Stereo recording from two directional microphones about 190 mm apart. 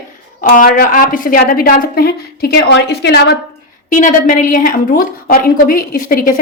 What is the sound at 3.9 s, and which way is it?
A woman's voice, 40° left (ahead or behind).